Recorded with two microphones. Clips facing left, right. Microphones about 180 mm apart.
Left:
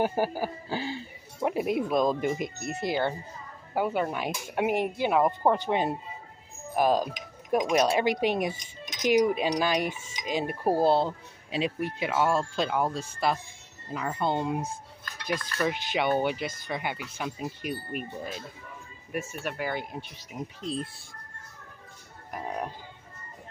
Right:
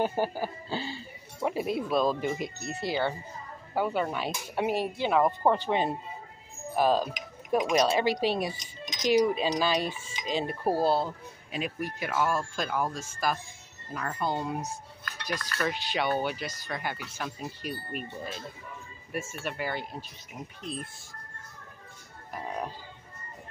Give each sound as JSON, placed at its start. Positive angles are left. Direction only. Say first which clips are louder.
{"t": 0.0, "sound": "speech", "louder": "left 2 dB", "side_deg": 10}
{"t": 19.4, "sound": "speech", "louder": "left 1 dB", "side_deg": 0}
{"t": 20.0, "sound": "speech", "louder": "left 4 dB", "side_deg": 85}